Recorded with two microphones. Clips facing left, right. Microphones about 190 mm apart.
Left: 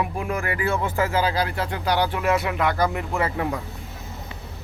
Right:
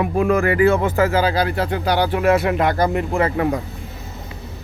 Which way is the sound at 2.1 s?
25° right (ahead or behind).